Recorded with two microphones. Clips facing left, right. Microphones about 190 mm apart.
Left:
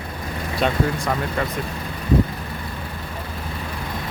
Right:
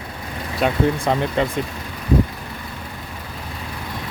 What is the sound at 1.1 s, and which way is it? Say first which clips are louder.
Speech: right 4 dB; 25° right (ahead or behind).